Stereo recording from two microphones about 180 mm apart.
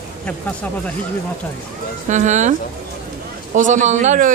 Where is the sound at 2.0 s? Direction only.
40° right (ahead or behind).